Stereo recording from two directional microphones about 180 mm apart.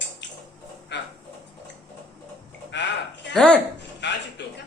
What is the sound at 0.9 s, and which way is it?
Dog, 75° left (ahead or behind).